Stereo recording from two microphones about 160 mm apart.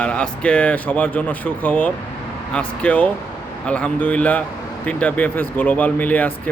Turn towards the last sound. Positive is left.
turn(degrees=10)  # may be behind; listen again after turning